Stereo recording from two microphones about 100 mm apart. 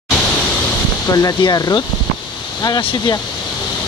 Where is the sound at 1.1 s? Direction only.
40° left (ahead or behind).